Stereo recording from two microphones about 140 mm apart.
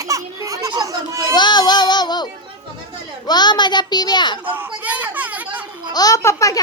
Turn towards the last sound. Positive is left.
turn(degrees=25)  # may be behind; listen again after turning